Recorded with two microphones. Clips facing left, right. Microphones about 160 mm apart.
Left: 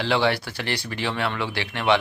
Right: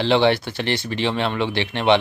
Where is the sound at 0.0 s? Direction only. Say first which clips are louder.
Right 5 dB; 25° right (ahead or behind).